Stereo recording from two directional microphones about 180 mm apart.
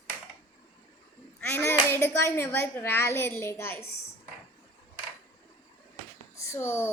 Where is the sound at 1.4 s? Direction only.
10° left (ahead or behind).